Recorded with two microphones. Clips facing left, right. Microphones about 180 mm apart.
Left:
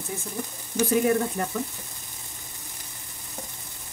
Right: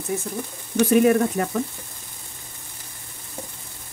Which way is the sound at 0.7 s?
75° right (ahead or behind).